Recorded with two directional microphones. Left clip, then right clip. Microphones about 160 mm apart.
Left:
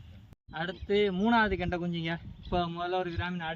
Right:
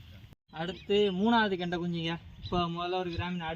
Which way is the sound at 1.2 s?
15° left (ahead or behind).